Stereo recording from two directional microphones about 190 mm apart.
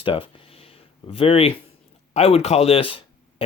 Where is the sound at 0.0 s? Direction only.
30° left (ahead or behind).